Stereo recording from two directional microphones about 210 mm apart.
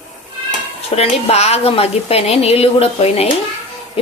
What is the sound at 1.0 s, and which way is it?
A woman's voice, 30° left (ahead or behind).